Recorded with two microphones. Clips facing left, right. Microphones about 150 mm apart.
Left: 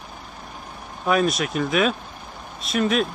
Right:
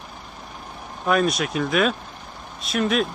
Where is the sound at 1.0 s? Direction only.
Centre (ahead or behind).